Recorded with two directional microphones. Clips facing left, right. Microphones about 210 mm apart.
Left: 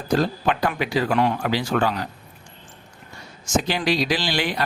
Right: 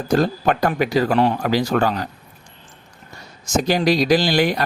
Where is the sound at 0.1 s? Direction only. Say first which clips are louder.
Right 3 dB; 45° right (ahead or behind).